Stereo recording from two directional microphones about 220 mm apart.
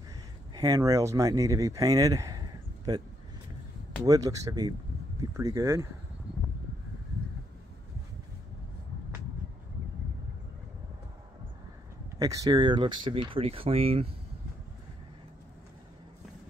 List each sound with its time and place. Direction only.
0.6 s speech: 15° right (ahead or behind)
4.0 s speech: 15° right (ahead or behind)
12.2 s speech: 15° right (ahead or behind)